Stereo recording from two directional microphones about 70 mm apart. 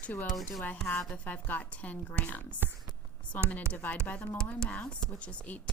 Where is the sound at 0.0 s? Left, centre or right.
Left.